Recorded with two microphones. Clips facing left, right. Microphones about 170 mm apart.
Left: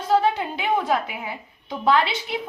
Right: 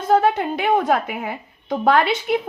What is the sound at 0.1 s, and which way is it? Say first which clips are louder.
A woman's voice: right 3 dB; 50° right (ahead or behind).